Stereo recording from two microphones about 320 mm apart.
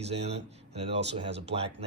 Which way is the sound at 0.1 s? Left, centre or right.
Centre.